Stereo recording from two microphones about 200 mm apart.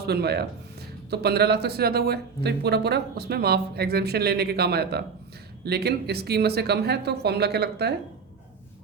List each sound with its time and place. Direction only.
0.0 s speech: 55° right (ahead or behind)